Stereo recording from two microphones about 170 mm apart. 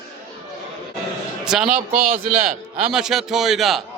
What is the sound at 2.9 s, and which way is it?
Speech, 5° right (ahead or behind).